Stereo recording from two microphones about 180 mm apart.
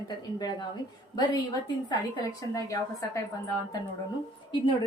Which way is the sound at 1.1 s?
20° left (ahead or behind).